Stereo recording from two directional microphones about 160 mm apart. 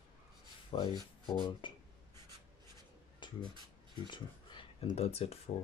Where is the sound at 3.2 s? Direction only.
30° left (ahead or behind).